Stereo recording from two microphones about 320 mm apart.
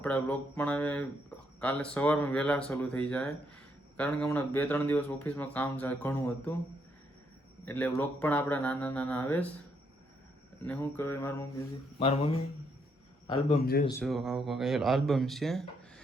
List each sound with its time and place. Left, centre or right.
0.0 s speech: centre
7.6 s speech: centre
10.7 s mantra: centre
13.2 s speech: centre
14.0 s speech: centre